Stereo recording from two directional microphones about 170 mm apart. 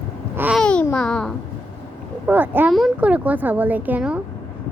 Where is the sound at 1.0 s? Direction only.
5° left (ahead or behind).